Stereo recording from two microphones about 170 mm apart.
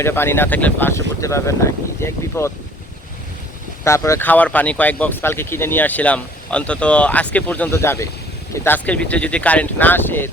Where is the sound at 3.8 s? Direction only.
15° left (ahead or behind).